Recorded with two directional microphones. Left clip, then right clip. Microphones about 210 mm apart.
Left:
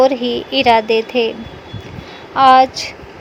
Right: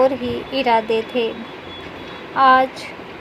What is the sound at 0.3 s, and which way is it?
A woman's voice, 40° left (ahead or behind).